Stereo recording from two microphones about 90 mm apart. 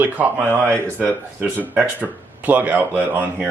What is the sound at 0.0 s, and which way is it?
Speech, 20° right (ahead or behind).